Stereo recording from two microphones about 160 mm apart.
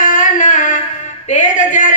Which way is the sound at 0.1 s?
50° left (ahead or behind).